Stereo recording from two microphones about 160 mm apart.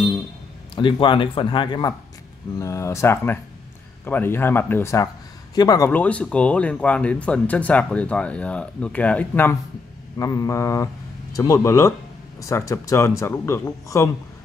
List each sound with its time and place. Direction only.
0.7 s a man's voice: 30° left (ahead or behind)
5.9 s speech: 10° left (ahead or behind)
10.1 s mantra: 20° left (ahead or behind)
11.3 s speech: 20° left (ahead or behind)